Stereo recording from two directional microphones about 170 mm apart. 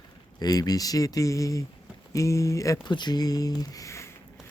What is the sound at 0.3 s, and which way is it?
Speech, 20° left (ahead or behind).